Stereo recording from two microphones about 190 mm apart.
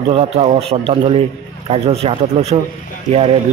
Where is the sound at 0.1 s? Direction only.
30° right (ahead or behind).